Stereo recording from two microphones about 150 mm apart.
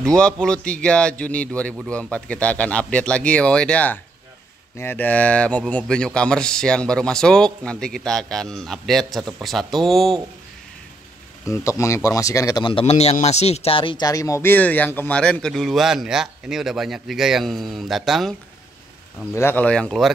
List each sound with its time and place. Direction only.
0.0 s speech: 5° left (ahead or behind)
11.5 s speech: 20° left (ahead or behind); by 18.3 s centre (ahead or behind)
19.3 s speech: 15° left (ahead or behind)